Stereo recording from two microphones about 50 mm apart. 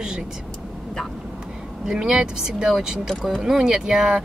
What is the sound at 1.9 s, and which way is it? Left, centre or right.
Speech, centre.